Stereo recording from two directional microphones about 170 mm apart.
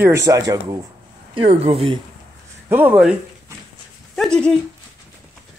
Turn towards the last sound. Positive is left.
turn(degrees=5)  # may be behind; listen again after turning